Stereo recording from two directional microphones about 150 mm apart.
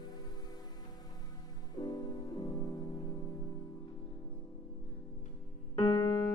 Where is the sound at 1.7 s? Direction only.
25° left (ahead or behind).